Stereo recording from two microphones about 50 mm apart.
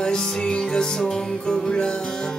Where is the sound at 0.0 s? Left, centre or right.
Centre.